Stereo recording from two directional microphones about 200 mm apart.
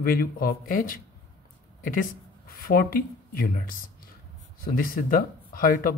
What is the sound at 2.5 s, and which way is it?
Speech, 45° left (ahead or behind).